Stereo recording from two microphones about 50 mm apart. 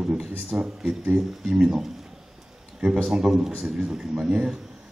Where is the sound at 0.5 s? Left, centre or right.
Centre.